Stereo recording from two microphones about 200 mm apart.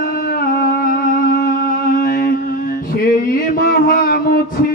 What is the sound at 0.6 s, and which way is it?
Music, 45° left (ahead or behind).